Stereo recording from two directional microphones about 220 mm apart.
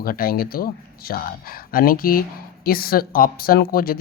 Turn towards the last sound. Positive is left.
turn(degrees=40)  # may be behind; listen again after turning